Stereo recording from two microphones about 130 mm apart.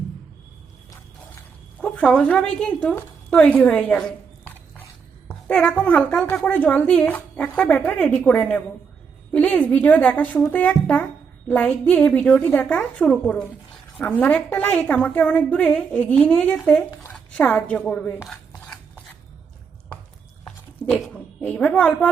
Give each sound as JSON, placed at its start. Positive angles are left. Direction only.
{"t": 1.8, "sound": "a woman's voice", "side_deg": 5}
{"t": 21.1, "sound": "a woman's voice", "side_deg": 10}